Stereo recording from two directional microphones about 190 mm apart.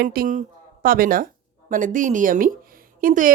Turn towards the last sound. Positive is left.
turn(degrees=-45)  # may be behind; listen again after turning